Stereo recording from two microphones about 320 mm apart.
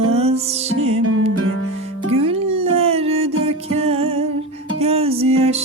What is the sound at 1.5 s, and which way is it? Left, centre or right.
Music, left.